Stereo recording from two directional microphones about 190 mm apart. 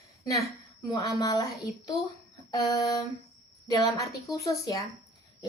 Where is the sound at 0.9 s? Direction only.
20° left (ahead or behind).